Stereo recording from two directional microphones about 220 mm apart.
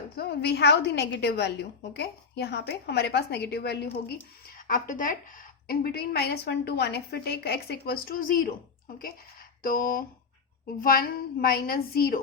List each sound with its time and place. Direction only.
0.2 s a woman's voice: 50° left (ahead or behind)
4.5 s a woman's voice: 40° left (ahead or behind)
9.6 s a sound: 40° left (ahead or behind)
10.8 s a woman's voice: 40° left (ahead or behind)